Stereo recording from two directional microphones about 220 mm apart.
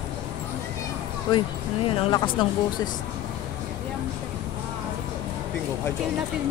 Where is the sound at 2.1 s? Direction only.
20° left (ahead or behind).